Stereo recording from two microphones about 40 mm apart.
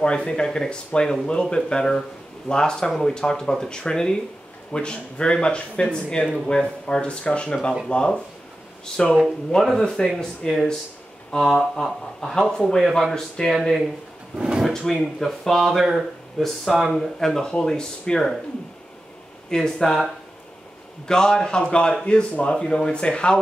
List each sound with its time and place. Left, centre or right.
0.0 s speech: left
14.3 s speech: centre
14.7 s speech: centre
15.6 s speech: centre
16.3 s speech: centre
19.5 s speech: centre
21.1 s speech: centre